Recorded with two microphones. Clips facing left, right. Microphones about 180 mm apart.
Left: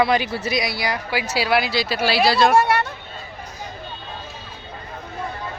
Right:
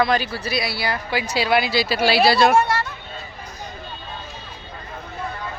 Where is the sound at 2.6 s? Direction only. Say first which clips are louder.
Left 3 dB; 60° left (ahead or behind).